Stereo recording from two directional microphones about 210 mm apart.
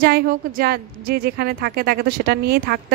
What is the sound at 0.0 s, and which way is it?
Speech, 45° right (ahead or behind).